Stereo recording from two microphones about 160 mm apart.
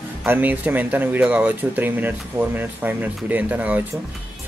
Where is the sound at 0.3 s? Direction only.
10° right (ahead or behind).